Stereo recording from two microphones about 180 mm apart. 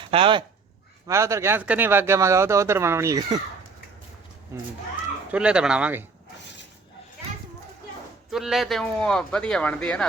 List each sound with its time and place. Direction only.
0.1 s speech: 30° right (ahead or behind)
1.0 s speech: 15° right (ahead or behind)
5.3 s speech: 5° right (ahead or behind)
8.3 s speech: centre (ahead or behind)